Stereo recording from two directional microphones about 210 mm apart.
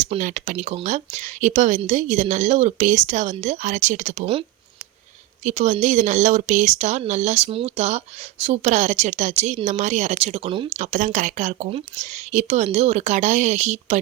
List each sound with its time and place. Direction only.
0.0 s speech: 35° right (ahead or behind)